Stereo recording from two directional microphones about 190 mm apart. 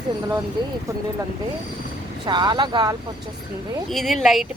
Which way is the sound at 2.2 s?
25° right (ahead or behind).